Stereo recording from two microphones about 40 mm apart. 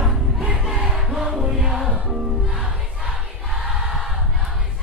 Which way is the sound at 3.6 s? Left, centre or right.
Centre.